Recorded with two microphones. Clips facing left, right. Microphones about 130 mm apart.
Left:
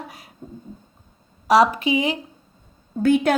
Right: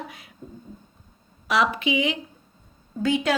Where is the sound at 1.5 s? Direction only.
40° left (ahead or behind).